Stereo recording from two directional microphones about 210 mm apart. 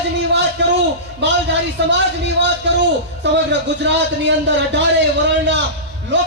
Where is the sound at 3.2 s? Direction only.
60° right (ahead or behind).